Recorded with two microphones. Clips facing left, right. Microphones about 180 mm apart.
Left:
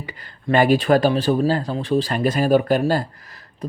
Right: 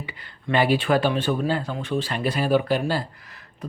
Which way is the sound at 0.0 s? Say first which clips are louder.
Left 4 dB; 40° left (ahead or behind).